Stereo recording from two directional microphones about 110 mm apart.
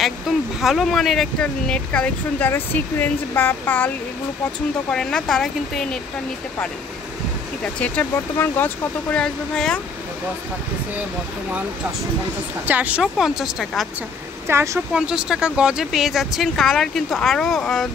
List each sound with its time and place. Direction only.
0.6 s speech: centre (ahead or behind); by 3.9 s 15° left (ahead or behind)
4.9 s speech: 5° left (ahead or behind)
7.8 s speech: 15° left (ahead or behind)
9.1 s speech: 5° left (ahead or behind)
12.6 s speech: 15° right (ahead or behind)
14.5 s speech: 25° right (ahead or behind)
15.0 s speech: 5° right (ahead or behind)